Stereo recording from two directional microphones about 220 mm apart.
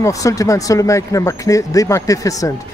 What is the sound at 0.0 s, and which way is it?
Speech, 15° left (ahead or behind).